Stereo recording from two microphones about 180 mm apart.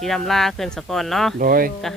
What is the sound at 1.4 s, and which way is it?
Speech, 55° right (ahead or behind).